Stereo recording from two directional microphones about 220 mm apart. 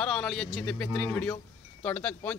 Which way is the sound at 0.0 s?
5° left (ahead or behind).